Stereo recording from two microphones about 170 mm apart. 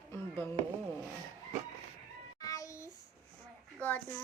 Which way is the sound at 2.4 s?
20° left (ahead or behind).